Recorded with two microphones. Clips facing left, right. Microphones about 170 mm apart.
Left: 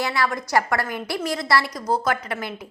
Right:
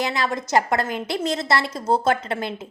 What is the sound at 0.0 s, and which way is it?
A woman's voice, 20° right (ahead or behind).